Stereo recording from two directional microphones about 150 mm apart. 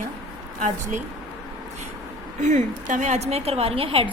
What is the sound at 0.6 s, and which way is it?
Speech, 55° right (ahead or behind).